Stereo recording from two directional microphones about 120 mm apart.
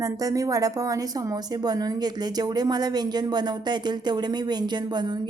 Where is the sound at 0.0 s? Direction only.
30° right (ahead or behind).